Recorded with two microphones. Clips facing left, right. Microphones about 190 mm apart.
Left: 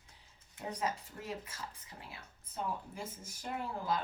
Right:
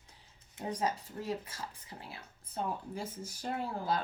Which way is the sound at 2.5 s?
35° right (ahead or behind).